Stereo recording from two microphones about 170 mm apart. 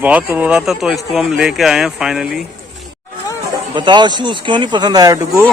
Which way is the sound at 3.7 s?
25° right (ahead or behind).